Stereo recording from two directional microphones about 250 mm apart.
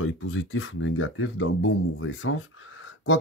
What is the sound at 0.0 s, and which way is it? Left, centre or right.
Speech, left.